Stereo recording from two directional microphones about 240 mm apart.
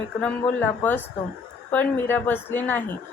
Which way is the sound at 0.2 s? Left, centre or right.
Centre.